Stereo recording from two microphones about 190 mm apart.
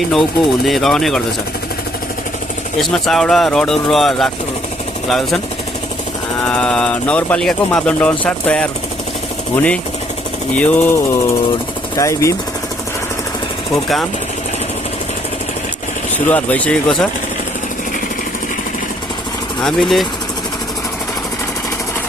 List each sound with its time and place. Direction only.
0.1 s speech: centre (ahead or behind)
2.7 s speech: centre (ahead or behind)
6.4 s speech: 5° left (ahead or behind)
10.6 s speech: 5° left (ahead or behind)
13.7 s speech: centre (ahead or behind)
16.1 s speech: 10° left (ahead or behind)
19.6 s speech: centre (ahead or behind)